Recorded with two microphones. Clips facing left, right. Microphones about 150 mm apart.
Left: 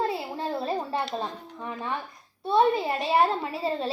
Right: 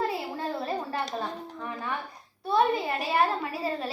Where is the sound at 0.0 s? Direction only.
25° left (ahead or behind).